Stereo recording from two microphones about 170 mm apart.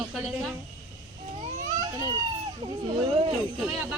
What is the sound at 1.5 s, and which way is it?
Baby cry, 40° right (ahead or behind).